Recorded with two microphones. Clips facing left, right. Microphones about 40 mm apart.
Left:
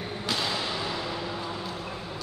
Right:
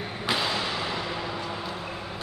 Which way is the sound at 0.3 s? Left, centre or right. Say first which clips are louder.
Right 3 dB; centre.